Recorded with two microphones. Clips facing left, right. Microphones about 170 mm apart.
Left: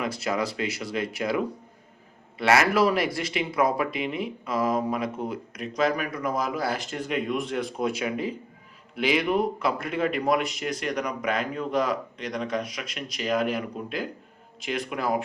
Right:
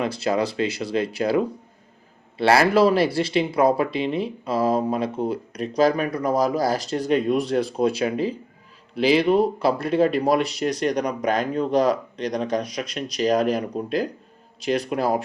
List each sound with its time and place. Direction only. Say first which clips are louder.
0.0 s speech: right 5 dB; 30° right (ahead or behind)